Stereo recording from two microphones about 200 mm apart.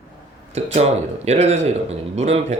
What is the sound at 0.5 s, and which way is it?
A man's voice, 35° right (ahead or behind).